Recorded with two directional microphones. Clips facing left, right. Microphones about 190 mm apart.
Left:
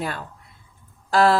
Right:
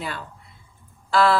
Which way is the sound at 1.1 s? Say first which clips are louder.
Left 2 dB; 40° left (ahead or behind).